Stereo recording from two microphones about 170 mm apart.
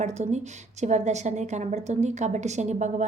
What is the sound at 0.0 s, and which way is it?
A woman's voice, 40° right (ahead or behind).